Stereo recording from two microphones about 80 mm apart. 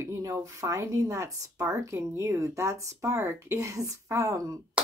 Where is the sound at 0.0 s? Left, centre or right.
Right.